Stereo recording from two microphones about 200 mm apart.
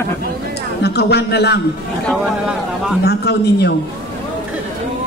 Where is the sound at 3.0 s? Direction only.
55° left (ahead or behind).